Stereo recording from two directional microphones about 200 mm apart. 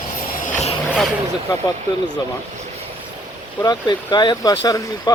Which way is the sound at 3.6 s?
20° left (ahead or behind).